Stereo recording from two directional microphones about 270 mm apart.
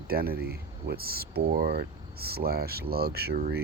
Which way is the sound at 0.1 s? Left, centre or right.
Right.